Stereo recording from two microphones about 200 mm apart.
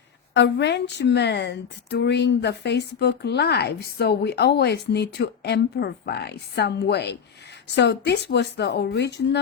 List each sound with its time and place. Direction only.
0.3 s speech: 60° left (ahead or behind)